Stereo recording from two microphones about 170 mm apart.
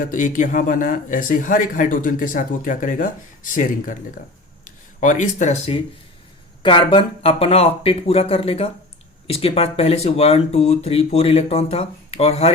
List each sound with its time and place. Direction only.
0.0 s speech: 50° left (ahead or behind)